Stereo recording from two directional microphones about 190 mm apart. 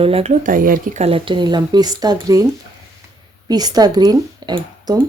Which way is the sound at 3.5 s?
20° right (ahead or behind).